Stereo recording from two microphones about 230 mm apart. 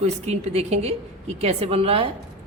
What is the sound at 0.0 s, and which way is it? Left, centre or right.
A woman's voice, right.